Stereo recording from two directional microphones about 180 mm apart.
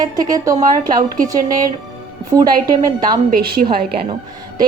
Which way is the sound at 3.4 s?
60° right (ahead or behind).